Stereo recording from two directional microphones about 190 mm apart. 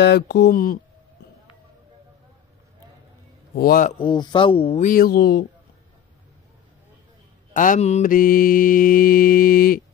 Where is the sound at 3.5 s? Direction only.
50° left (ahead or behind).